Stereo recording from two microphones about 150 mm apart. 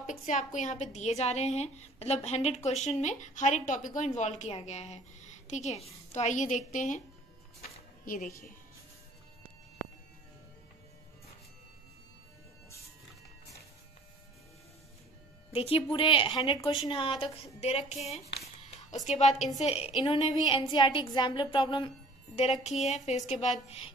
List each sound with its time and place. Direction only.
0.0 s a woman's voice: 55° left (ahead or behind)
8.0 s speech: 65° left (ahead or behind)
15.5 s a woman's voice: 40° left (ahead or behind)
22.8 s a woman's voice: 50° left (ahead or behind)